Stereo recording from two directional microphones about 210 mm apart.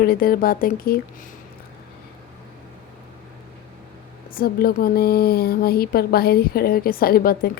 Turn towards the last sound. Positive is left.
turn(degrees=45)  # may be behind; listen again after turning